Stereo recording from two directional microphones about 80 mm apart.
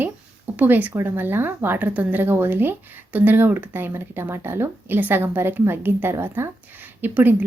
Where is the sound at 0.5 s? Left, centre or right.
Right.